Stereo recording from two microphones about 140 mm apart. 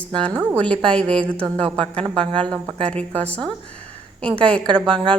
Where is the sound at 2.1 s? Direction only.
40° right (ahead or behind).